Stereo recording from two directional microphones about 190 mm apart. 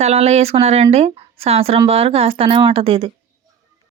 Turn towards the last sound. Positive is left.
turn(degrees=-30)  # may be behind; listen again after turning